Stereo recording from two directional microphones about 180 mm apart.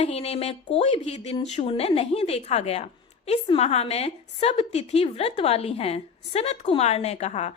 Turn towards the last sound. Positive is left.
turn(degrees=35)  # may be behind; listen again after turning